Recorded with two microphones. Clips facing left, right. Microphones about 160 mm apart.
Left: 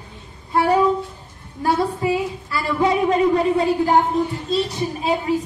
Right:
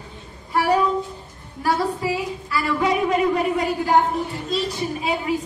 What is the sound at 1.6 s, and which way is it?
Music, 25° left (ahead or behind).